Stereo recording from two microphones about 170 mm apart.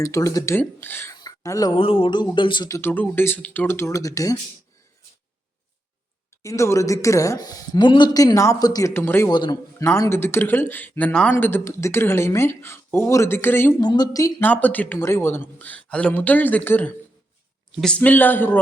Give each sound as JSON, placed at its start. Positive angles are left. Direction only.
{"t": 0.0, "sound": "a woman's voice", "side_deg": 20}
{"t": 6.4, "sound": "a woman's voice", "side_deg": 15}
{"t": 9.3, "sound": "a woman's voice", "side_deg": 25}
{"t": 9.8, "sound": "speech", "side_deg": 15}
{"t": 13.8, "sound": "a woman's voice", "side_deg": 25}